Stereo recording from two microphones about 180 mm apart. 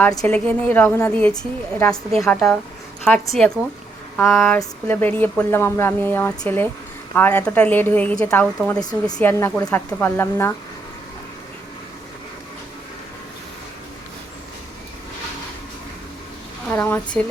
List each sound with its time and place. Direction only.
0.2 s a woman's voice: 5° left (ahead or behind)
8.8 s speech: 20° left (ahead or behind)
9.1 s speech: 10° left (ahead or behind)
16.6 s a sound: 10° left (ahead or behind)